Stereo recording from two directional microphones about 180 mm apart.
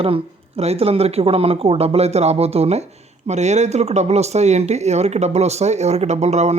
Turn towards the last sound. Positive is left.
turn(degrees=-35)  # may be behind; listen again after turning